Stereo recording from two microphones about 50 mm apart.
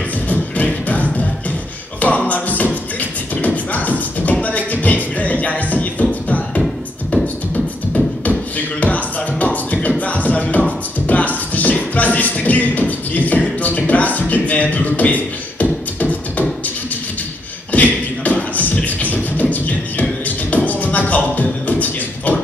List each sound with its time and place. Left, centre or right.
0.3 s music: left
2.0 s beatboxing: left
6.2 s music: left
7.5 s beatboxing: left
11.1 s music: left
13.4 s beatboxing: left
17.7 s beatboxing: left